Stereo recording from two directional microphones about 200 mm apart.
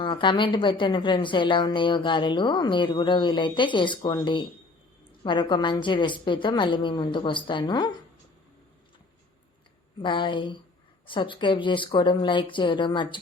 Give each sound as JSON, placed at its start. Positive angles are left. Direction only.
{"t": 0.0, "sound": "a woman's voice", "side_deg": 25}
{"t": 10.0, "sound": "a woman's voice", "side_deg": 25}